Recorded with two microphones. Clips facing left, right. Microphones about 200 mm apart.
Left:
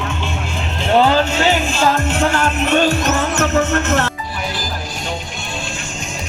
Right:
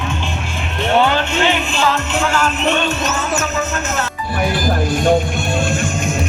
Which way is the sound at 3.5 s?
65° left (ahead or behind).